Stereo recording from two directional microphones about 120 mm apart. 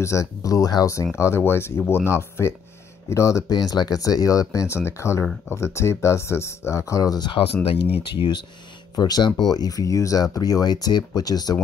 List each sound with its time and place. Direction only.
0.0 s speech: 25° left (ahead or behind)